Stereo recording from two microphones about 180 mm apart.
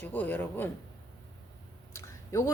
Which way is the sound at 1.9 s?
15° left (ahead or behind).